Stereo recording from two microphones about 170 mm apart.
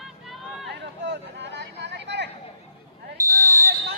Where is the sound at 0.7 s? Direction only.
85° right.